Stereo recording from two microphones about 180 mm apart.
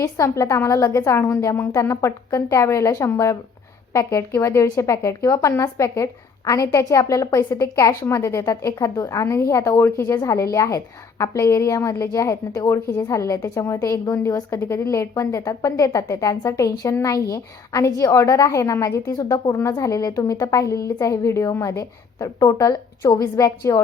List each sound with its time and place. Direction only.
0.0 s a woman's voice: 15° left (ahead or behind)
4.4 s a woman's voice: 15° left (ahead or behind)